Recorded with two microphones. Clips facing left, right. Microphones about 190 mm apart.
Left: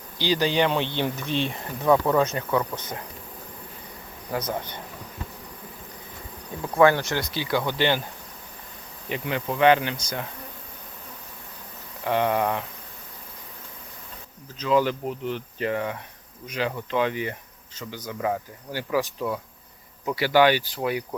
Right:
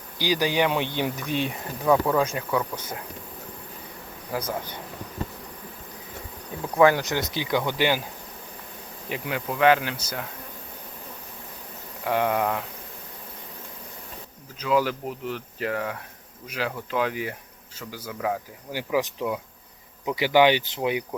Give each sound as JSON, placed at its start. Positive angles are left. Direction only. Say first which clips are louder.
{"t": 0.2, "sound": "speech", "louder": "left 1 dB", "side_deg": -10}
{"t": 4.3, "sound": "speech", "louder": "left 1 dB", "side_deg": -10}
{"t": 6.7, "sound": "speech", "louder": "even", "side_deg": -15}
{"t": 9.0, "sound": "speech", "louder": "left 2 dB", "side_deg": -5}
{"t": 12.0, "sound": "speech", "louder": "left 1 dB", "side_deg": -5}
{"t": 14.6, "sound": "speech", "louder": "left 1 dB", "side_deg": -5}
{"t": 18.7, "sound": "speech", "louder": "even", "side_deg": -15}